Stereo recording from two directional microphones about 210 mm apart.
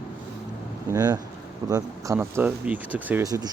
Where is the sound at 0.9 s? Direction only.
20° right (ahead or behind).